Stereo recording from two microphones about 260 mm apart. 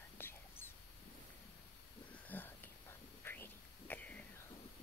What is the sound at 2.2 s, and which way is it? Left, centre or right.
Whispering, centre.